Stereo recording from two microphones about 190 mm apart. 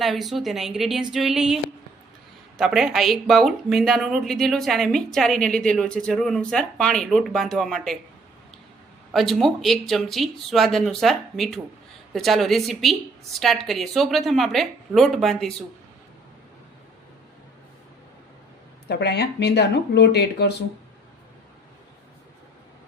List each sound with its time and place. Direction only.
0.0 s speech: centre (ahead or behind)
2.6 s speech: centre (ahead or behind)
9.1 s speech: centre (ahead or behind)
18.9 s speech: 60° left (ahead or behind)